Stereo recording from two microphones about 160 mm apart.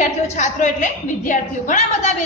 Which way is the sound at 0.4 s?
50° left (ahead or behind).